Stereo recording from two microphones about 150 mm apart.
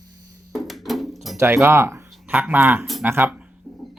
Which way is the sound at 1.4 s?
15° right (ahead or behind).